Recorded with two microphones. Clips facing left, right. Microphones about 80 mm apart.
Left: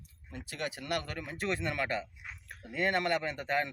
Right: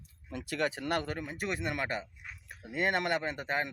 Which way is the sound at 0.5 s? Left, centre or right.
Right.